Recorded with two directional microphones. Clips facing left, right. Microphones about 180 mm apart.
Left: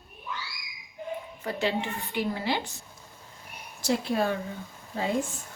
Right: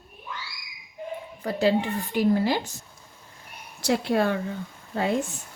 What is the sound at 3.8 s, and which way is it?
Speech, 65° right (ahead or behind).